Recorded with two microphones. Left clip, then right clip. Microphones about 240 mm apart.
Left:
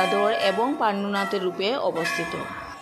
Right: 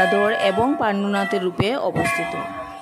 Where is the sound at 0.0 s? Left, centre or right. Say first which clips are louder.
Right 4 dB; right.